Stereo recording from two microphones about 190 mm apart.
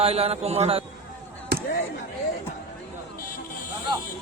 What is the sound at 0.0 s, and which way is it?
Speech, 30° right (ahead or behind).